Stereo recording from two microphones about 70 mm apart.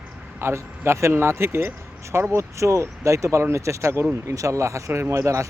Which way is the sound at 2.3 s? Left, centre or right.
Right.